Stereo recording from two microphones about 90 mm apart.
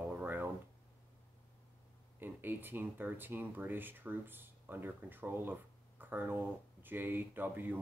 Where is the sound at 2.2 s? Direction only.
20° right (ahead or behind).